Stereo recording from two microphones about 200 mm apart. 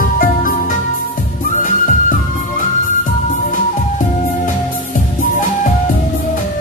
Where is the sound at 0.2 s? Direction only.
40° left (ahead or behind).